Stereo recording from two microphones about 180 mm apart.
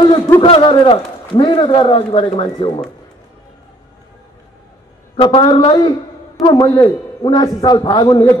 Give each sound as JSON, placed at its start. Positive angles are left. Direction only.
{"t": 0.4, "sound": "a man's voice", "side_deg": 25}
{"t": 5.2, "sound": "a man's voice", "side_deg": 25}